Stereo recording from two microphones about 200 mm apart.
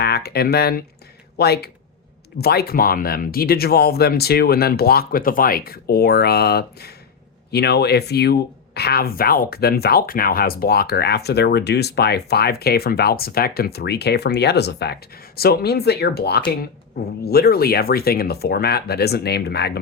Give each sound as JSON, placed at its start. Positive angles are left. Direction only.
{"t": 0.0, "sound": "speech", "side_deg": 50}